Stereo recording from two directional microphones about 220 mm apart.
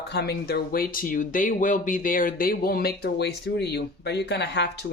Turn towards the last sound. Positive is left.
turn(degrees=50)  # may be behind; listen again after turning